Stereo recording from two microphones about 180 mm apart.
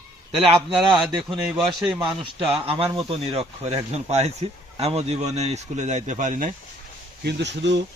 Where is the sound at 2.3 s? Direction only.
35° right (ahead or behind).